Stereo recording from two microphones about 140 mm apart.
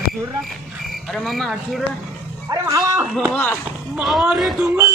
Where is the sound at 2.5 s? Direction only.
25° right (ahead or behind).